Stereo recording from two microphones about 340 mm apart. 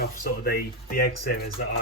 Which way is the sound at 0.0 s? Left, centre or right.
Left.